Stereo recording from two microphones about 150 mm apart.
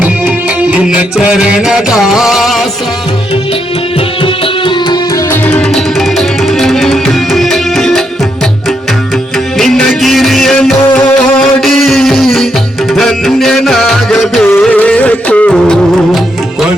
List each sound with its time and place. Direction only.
0.7 s music: 5° right (ahead or behind)
5.3 s music: 10° left (ahead or behind)
9.6 s music: centre (ahead or behind)